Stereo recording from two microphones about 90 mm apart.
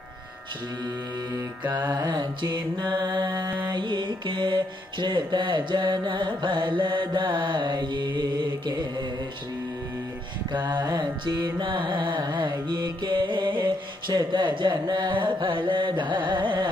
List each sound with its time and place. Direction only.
1.9 s carnatic music: 50° right (ahead or behind)
10.7 s carnatic music: 55° right (ahead or behind)